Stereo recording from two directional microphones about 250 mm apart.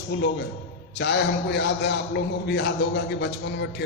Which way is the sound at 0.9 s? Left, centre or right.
Left.